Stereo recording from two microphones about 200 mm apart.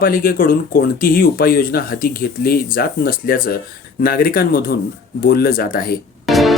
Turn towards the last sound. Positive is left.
turn(degrees=0)  # may be behind; listen again after turning